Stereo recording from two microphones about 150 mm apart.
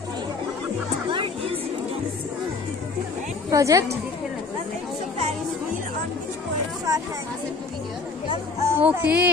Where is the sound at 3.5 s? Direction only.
20° right (ahead or behind).